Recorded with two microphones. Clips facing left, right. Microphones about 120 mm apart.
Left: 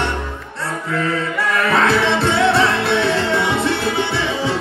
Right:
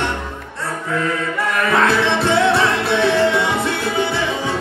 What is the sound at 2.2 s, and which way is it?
Music, 20° right (ahead or behind).